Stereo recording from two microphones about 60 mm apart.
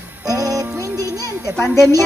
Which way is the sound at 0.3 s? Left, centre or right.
Right.